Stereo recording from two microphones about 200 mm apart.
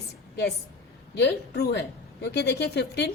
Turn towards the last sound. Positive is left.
turn(degrees=55)  # may be behind; listen again after turning